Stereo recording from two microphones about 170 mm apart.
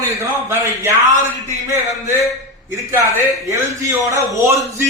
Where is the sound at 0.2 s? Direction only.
15° right (ahead or behind).